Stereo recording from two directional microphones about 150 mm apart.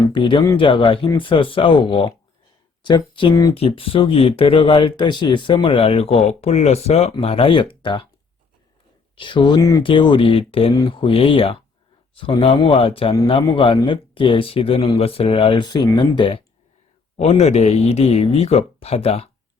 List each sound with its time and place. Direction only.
0.0 s speech: 30° left (ahead or behind)
9.1 s speech: 35° left (ahead or behind)
17.2 s speech: 45° left (ahead or behind)